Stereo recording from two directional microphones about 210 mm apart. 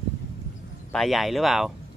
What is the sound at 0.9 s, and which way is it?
Speech, centre (ahead or behind).